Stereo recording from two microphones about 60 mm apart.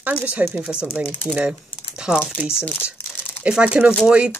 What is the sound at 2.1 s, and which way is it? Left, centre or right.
Speech, centre.